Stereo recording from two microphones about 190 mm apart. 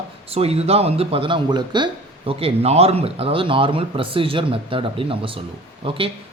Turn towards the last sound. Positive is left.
turn(degrees=-30)  # may be behind; listen again after turning